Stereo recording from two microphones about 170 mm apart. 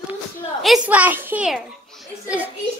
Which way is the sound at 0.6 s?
5° right (ahead or behind).